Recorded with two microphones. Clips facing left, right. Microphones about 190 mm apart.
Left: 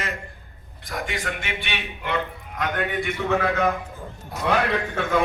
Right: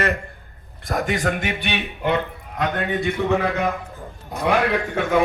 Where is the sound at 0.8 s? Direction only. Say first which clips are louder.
Right 7 dB; 45° right (ahead or behind).